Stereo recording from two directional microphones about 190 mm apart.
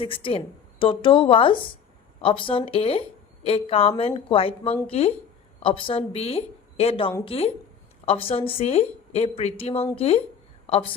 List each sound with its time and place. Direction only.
0.0 s a woman's voice: 25° left (ahead or behind)